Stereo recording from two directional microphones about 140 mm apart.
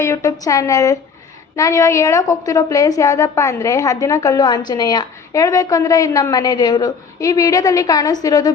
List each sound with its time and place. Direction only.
0.0 s a woman's voice: 20° left (ahead or behind)